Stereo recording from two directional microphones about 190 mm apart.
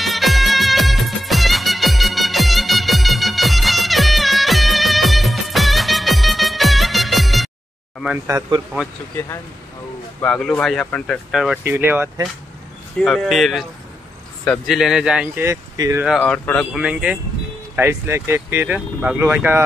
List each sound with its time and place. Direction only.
0.0 s music: centre (ahead or behind)
8.3 s speech: 20° right (ahead or behind)
10.2 s speech: 5° left (ahead or behind); by 12.1 s 10° right (ahead or behind)
13.0 s speech: centre (ahead or behind); by 16.1 s 15° right (ahead or behind)
16.1 s speech: 5° left (ahead or behind)
16.7 s speech: 5° right (ahead or behind)